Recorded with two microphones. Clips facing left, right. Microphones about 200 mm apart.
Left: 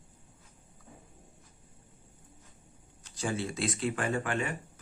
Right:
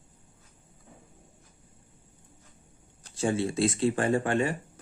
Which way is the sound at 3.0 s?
30° right (ahead or behind).